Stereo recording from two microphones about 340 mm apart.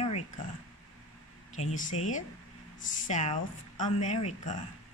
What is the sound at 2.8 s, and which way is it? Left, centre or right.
Speech, left.